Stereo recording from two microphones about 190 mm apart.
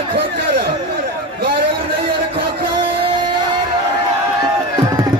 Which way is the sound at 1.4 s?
50° right (ahead or behind).